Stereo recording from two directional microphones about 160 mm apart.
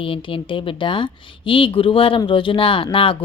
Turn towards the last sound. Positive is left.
turn(degrees=35)  # may be behind; listen again after turning